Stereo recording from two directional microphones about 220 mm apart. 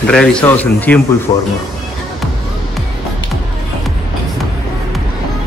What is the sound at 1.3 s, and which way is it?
Speech, 25° left (ahead or behind).